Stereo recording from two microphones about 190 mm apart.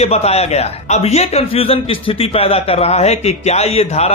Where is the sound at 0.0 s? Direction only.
35° left (ahead or behind).